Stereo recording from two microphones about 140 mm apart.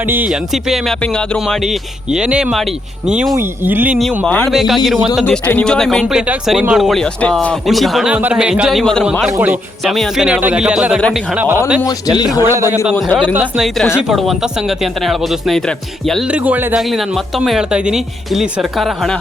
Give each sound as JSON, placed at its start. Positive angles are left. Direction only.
{"t": 0.3, "sound": "speech", "side_deg": 0}
{"t": 1.0, "sound": "music", "side_deg": 5}
{"t": 1.6, "sound": "a man's voice", "side_deg": -5}
{"t": 4.3, "sound": "speech", "side_deg": 5}
{"t": 5.2, "sound": "speech", "side_deg": 10}
{"t": 9.2, "sound": "a man's voice", "side_deg": -5}
{"t": 11.3, "sound": "a man's voice", "side_deg": -15}
{"t": 11.8, "sound": "speech", "side_deg": 25}
{"t": 12.4, "sound": "a man's voice", "side_deg": -20}
{"t": 16.3, "sound": "a man's voice", "side_deg": -10}
{"t": 16.9, "sound": "speech", "side_deg": 0}